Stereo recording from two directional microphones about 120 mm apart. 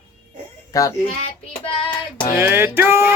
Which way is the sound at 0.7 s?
25° left (ahead or behind).